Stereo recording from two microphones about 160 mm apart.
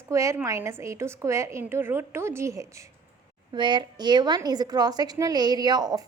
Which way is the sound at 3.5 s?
30° right (ahead or behind).